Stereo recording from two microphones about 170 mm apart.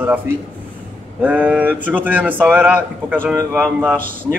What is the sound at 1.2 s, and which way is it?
Speech, 10° right (ahead or behind).